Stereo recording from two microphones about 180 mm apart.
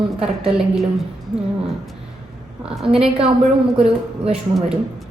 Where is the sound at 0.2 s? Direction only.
Centre (ahead or behind).